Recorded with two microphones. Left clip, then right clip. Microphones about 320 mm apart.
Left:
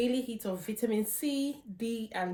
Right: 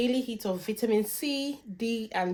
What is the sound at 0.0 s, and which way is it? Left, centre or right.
Speech, right.